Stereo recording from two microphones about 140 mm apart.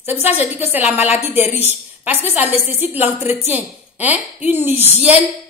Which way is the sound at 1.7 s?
15° right (ahead or behind).